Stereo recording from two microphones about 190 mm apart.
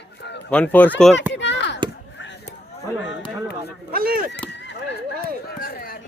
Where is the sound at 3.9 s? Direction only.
55° right (ahead or behind).